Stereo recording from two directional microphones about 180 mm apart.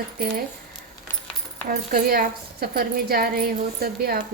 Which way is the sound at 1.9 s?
55° right (ahead or behind).